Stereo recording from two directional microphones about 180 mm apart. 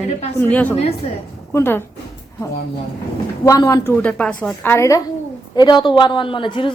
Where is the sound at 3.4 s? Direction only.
20° left (ahead or behind).